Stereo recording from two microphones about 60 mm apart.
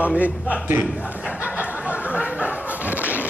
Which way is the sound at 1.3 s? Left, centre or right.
Right.